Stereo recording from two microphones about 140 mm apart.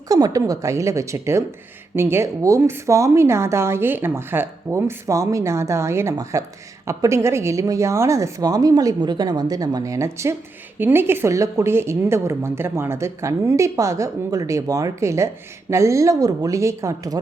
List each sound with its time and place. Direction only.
0.1 s a woman's voice: 25° right (ahead or behind)